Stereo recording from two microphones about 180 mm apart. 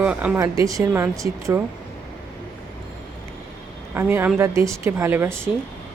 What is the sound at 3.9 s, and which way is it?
Speech, 10° right (ahead or behind).